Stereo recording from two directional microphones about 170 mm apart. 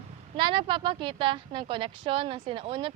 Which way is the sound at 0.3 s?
30° right (ahead or behind).